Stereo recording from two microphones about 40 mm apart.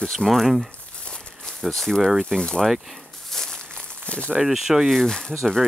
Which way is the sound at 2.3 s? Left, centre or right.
Centre.